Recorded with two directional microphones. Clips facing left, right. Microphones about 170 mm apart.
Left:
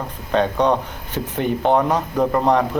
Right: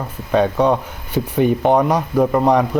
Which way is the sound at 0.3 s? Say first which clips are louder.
Right 2 dB; 10° right (ahead or behind).